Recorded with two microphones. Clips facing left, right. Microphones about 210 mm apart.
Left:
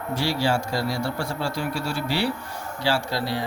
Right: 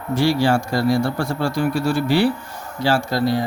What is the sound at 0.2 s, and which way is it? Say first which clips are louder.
A man's voice: right 7 dB; 55° right (ahead or behind).